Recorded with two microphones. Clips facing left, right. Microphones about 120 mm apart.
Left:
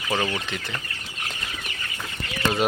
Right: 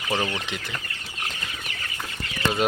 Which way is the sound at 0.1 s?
5° left (ahead or behind).